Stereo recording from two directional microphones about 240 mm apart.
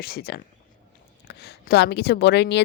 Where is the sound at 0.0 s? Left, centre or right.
Left.